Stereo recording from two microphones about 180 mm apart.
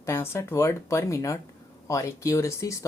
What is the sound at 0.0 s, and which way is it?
Speech, 15° left (ahead or behind).